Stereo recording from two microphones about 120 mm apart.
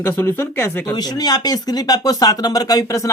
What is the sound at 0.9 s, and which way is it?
Speech, 35° left (ahead or behind).